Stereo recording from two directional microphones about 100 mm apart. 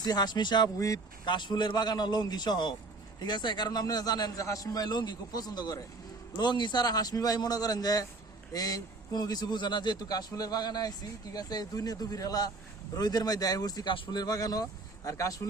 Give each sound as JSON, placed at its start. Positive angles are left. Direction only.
{"t": 0.0, "sound": "a man's voice", "side_deg": 40}
{"t": 1.2, "sound": "a man's voice", "side_deg": 50}